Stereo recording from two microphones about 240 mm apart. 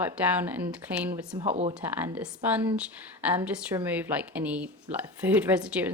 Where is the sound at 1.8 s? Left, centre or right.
Centre.